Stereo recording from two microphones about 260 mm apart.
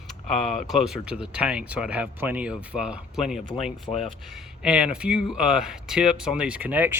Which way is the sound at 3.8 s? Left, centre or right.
Left.